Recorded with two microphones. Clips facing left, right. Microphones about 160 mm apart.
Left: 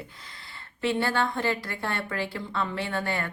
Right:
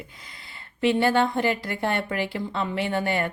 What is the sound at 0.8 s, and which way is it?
A woman's voice, 20° right (ahead or behind).